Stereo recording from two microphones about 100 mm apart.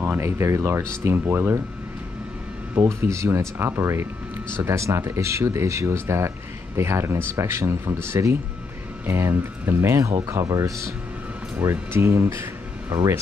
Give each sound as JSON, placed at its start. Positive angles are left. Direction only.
{"t": 0.0, "sound": "speech", "side_deg": -25}
{"t": 2.7, "sound": "speech", "side_deg": -25}